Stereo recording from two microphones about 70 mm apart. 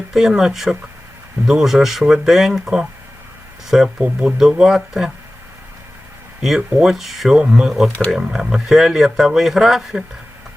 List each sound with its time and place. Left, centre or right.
0.1 s speech: centre
6.6 s speech: centre